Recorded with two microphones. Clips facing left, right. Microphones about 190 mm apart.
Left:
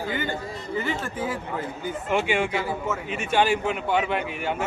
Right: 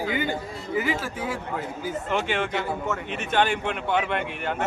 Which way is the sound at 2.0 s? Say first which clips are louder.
Left 4 dB; 10° left (ahead or behind).